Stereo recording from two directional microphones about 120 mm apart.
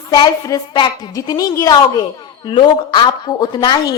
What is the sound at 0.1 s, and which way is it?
A woman's voice, 35° left (ahead or behind).